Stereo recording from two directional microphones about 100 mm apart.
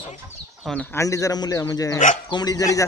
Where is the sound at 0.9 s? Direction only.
30° left (ahead or behind).